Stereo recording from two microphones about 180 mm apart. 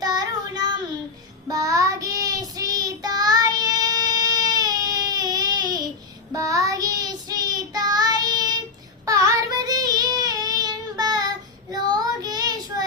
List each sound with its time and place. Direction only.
0.0 s child singing: 20° right (ahead or behind)